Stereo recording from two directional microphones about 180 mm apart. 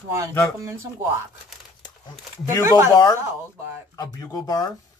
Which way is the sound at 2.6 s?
15° right (ahead or behind).